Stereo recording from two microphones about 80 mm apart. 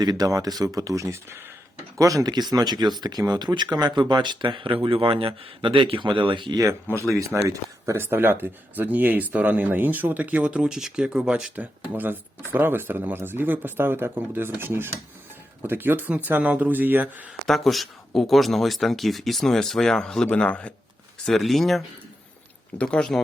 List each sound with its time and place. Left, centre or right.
0.0 s speech: right
2.0 s speech: right
6.9 s speech: right
7.3 s speech: centre
7.9 s speech: right
11.9 s speech: right
17.4 s speech: centre
21.2 s speech: centre
22.8 s speech: centre